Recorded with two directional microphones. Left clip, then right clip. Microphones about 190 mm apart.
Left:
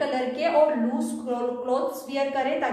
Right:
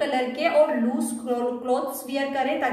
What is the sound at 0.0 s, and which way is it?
Speech, 15° right (ahead or behind).